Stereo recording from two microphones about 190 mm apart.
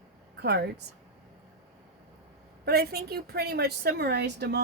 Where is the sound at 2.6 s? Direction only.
55° right (ahead or behind).